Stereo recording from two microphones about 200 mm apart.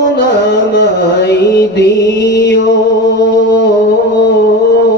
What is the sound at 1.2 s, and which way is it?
Mantra, 55° left (ahead or behind).